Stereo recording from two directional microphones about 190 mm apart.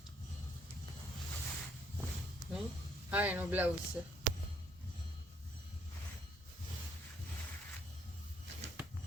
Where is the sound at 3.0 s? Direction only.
10° right (ahead or behind).